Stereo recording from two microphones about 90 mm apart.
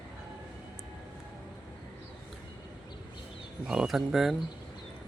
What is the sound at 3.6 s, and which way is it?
Speech, 5° right (ahead or behind).